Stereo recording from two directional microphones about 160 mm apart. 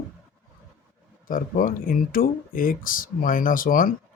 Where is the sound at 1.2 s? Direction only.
60° left (ahead or behind).